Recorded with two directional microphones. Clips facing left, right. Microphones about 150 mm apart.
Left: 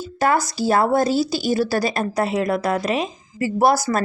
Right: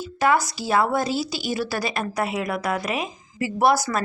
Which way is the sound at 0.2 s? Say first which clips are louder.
Left 2 dB; 40° left (ahead or behind).